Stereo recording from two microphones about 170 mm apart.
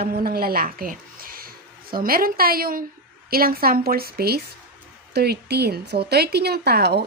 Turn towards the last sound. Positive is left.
turn(degrees=-75)  # may be behind; listen again after turning